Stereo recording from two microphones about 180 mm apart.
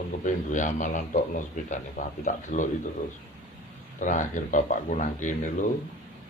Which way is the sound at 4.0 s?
45° left (ahead or behind).